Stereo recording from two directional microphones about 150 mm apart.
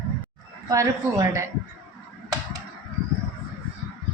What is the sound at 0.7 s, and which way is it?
Speech, 20° right (ahead or behind).